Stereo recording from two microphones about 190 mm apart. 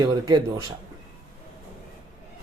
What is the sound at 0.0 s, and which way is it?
Speech, 25° right (ahead or behind).